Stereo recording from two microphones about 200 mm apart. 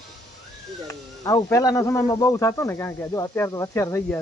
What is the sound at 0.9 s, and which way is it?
Speech, 15° left (ahead or behind).